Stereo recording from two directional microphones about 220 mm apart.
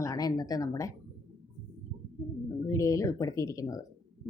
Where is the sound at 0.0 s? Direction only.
15° left (ahead or behind).